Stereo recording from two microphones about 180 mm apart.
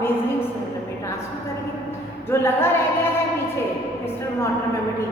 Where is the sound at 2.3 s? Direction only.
15° left (ahead or behind).